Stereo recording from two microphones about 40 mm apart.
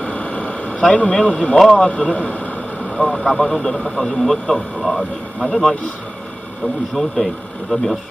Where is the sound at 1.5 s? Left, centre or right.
Centre.